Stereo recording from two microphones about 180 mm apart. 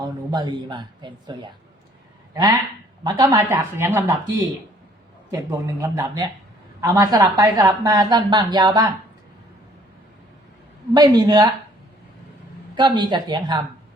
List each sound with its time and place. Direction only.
0.0 s speech: 25° right (ahead or behind)
5.3 s speech: 20° right (ahead or behind)
10.9 s speech: 25° right (ahead or behind)
12.7 s speech: 25° right (ahead or behind)